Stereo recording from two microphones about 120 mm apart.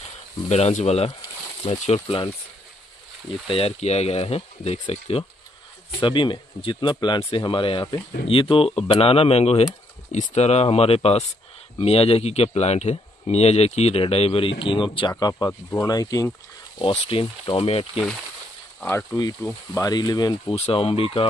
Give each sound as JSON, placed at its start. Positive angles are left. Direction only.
{"t": 0.5, "sound": "speech", "side_deg": 65}
{"t": 3.4, "sound": "speech", "side_deg": 55}
{"t": 5.9, "sound": "speech", "side_deg": 40}
{"t": 10.1, "sound": "speech", "side_deg": 75}
{"t": 17.1, "sound": "speech", "side_deg": 50}
{"t": 19.7, "sound": "speech", "side_deg": 30}
{"t": 20.5, "sound": "speech", "side_deg": 50}